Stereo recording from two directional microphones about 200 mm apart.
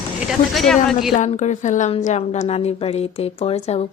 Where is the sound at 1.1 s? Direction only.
35° left (ahead or behind).